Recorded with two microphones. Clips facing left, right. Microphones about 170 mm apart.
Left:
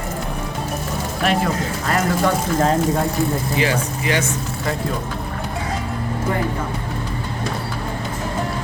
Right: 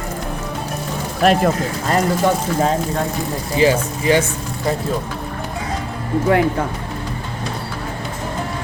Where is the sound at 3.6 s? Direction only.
30° right (ahead or behind).